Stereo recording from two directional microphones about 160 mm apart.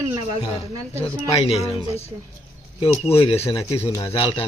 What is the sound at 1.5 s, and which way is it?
Speech, 40° left (ahead or behind).